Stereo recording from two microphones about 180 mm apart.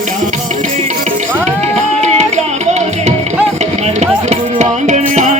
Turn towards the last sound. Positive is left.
turn(degrees=-40)  # may be behind; listen again after turning